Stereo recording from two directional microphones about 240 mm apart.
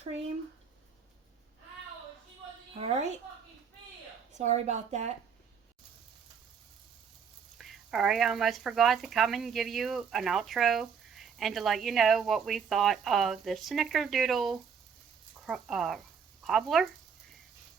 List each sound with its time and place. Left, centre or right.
2.7 s a woman's voice: right
4.3 s a woman's voice: right
7.6 s speech: centre